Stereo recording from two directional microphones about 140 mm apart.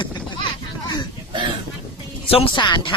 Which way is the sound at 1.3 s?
35° right (ahead or behind).